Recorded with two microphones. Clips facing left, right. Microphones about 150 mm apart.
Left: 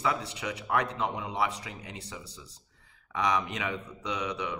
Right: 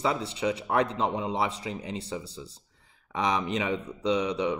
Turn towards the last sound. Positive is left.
turn(degrees=-25)  # may be behind; listen again after turning